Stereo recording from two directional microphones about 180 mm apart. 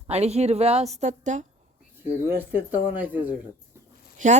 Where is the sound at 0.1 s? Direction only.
35° right (ahead or behind).